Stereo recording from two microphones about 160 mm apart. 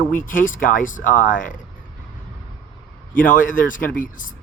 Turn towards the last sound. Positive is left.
turn(degrees=60)  # may be behind; listen again after turning